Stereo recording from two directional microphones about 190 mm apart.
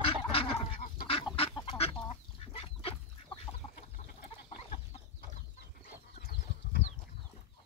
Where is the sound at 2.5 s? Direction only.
30° left (ahead or behind).